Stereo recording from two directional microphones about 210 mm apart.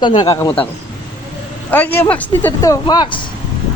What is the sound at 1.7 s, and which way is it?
Speech, 10° left (ahead or behind).